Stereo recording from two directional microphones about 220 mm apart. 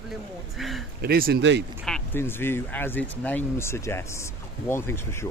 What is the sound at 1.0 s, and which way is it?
Speech, 45° right (ahead or behind).